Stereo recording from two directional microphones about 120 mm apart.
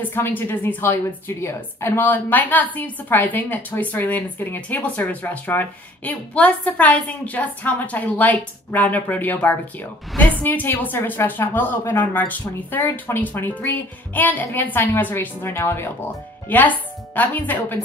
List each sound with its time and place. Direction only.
0.0 s a woman's voice: 15° left (ahead or behind)